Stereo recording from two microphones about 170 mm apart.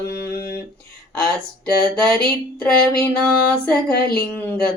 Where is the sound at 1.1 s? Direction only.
5° left (ahead or behind).